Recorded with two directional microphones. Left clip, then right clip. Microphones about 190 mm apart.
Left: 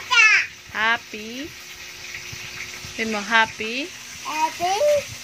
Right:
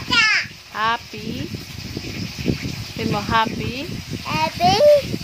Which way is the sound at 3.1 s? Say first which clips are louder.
Even; 5° right (ahead or behind).